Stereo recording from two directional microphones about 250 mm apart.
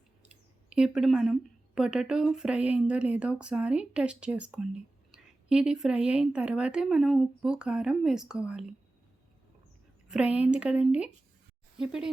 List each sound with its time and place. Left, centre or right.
0.3 s speech: centre
10.1 s speech: centre